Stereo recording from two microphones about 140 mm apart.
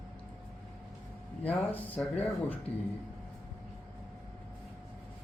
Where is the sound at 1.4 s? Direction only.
10° left (ahead or behind).